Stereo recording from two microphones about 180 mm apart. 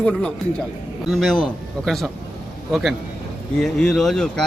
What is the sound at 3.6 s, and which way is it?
Speech, centre (ahead or behind).